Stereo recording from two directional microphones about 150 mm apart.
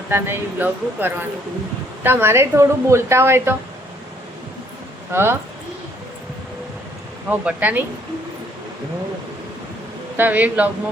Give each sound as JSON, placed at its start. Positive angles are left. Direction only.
{"t": 0.1, "sound": "a woman's voice", "side_deg": -15}
{"t": 5.1, "sound": "a woman's voice", "side_deg": -15}
{"t": 7.3, "sound": "a woman's voice", "side_deg": -10}
{"t": 10.2, "sound": "a woman's voice", "side_deg": -10}